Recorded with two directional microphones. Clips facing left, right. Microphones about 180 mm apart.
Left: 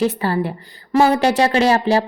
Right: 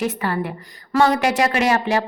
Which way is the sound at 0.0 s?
30° left (ahead or behind).